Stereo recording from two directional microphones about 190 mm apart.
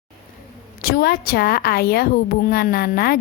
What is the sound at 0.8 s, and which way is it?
A woman's voice, 55° left (ahead or behind).